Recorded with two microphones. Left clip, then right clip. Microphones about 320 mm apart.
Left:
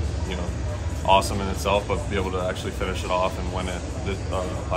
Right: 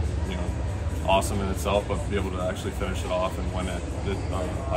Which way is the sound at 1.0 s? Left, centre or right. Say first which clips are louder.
Left 4 dB; centre.